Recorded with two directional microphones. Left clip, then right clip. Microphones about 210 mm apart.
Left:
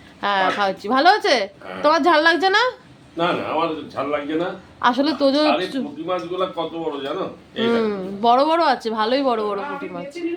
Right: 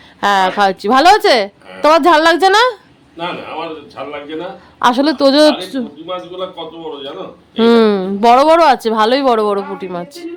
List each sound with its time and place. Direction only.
0.2 s a woman's voice: 45° right (ahead or behind)
3.2 s a man's voice: 5° left (ahead or behind)
4.8 s speech: 40° right (ahead or behind)
6.1 s a man's voice: 5° left (ahead or behind)
7.6 s speech: 45° right (ahead or behind)